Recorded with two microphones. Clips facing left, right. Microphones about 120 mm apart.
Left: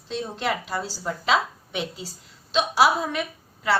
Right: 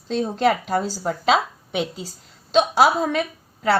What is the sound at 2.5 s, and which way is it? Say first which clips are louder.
Speech: right 4 dB; 55° right (ahead or behind).